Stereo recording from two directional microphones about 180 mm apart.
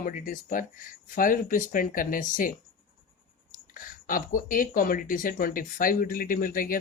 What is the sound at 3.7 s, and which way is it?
Speech, 50° left (ahead or behind).